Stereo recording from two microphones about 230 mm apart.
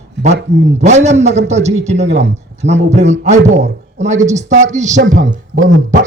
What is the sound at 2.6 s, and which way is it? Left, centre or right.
Speech, right.